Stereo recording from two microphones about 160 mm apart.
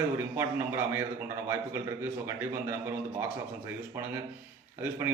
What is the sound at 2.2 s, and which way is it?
A man's voice, 15° right (ahead or behind).